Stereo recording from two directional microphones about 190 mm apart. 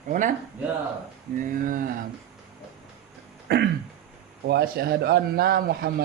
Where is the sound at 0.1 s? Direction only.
45° right (ahead or behind).